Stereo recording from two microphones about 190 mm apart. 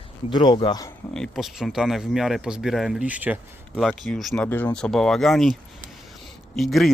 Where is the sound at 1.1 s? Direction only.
Centre (ahead or behind).